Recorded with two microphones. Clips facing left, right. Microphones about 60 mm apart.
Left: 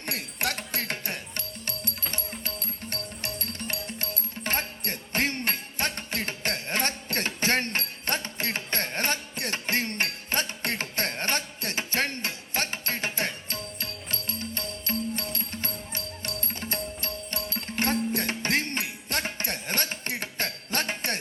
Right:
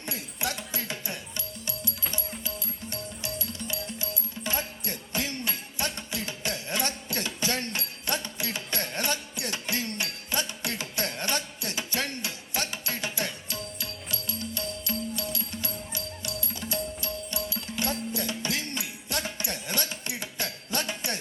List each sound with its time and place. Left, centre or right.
0.0 s music: left